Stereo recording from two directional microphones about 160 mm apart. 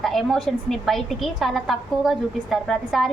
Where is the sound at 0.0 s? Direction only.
Centre (ahead or behind).